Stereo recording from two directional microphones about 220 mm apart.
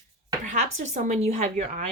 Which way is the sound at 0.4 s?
35° right (ahead or behind).